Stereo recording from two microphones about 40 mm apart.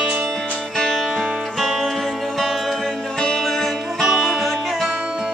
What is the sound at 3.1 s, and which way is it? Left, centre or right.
Music, centre.